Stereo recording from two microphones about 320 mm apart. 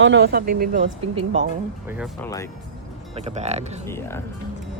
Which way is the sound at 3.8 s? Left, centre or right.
Centre.